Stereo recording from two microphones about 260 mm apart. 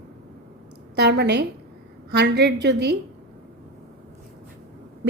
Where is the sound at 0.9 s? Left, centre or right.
Right.